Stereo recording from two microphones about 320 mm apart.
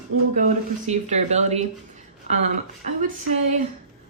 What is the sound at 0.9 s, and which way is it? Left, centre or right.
Speech, right.